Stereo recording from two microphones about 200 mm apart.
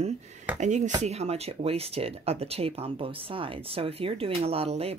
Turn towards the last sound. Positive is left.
turn(degrees=-30)  # may be behind; listen again after turning